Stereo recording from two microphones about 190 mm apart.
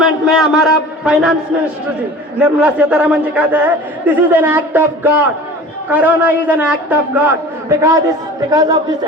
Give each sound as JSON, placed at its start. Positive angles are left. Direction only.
{"t": 0.0, "sound": "a man's voice", "side_deg": 0}
{"t": 2.4, "sound": "a man's voice", "side_deg": -5}